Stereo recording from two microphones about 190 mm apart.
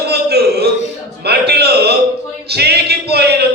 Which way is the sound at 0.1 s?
60° right (ahead or behind).